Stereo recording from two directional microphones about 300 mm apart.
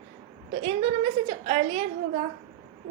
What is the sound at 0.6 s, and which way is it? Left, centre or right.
A woman's voice, centre.